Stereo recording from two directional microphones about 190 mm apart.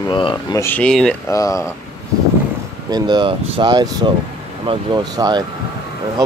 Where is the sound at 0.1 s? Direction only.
25° left (ahead or behind).